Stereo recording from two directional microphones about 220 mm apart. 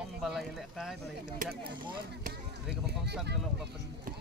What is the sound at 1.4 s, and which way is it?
Speech, 45° right (ahead or behind).